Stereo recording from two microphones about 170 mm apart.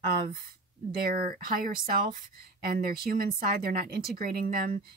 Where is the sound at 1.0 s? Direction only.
60° right (ahead or behind).